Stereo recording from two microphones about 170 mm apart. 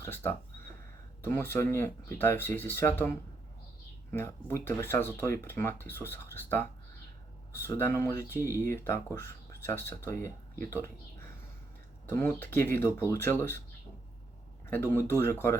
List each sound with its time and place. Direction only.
0.0 s speech: 15° left (ahead or behind)
12.0 s speech: 15° left (ahead or behind)
14.7 s speech: 15° left (ahead or behind)